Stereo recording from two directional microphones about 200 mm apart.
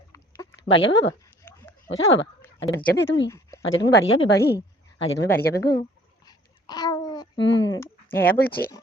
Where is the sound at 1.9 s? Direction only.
75° left (ahead or behind).